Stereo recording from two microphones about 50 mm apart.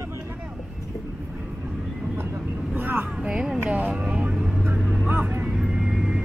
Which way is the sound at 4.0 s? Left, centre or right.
Right.